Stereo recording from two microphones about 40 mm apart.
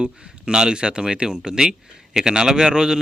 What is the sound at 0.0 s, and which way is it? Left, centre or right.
Speech, centre.